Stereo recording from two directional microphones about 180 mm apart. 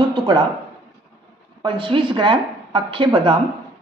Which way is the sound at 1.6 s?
30° right (ahead or behind).